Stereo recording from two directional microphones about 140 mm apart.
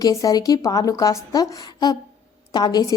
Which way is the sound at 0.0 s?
25° left (ahead or behind).